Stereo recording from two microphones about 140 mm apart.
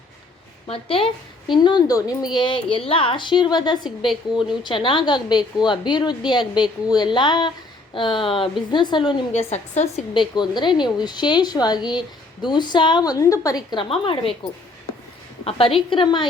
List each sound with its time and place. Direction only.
0.7 s a woman's voice: 40° left (ahead or behind)
9.3 s a woman's voice: 50° left (ahead or behind)
10.2 s a woman's voice: 30° left (ahead or behind)
15.4 s a woman's voice: 40° left (ahead or behind)